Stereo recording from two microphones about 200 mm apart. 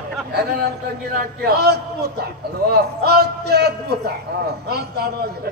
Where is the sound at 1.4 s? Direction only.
55° right (ahead or behind).